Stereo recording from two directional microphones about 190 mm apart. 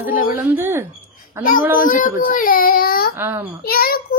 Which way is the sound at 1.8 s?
45° left (ahead or behind).